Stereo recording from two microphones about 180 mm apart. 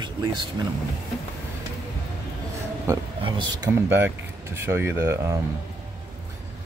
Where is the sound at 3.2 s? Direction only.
30° right (ahead or behind).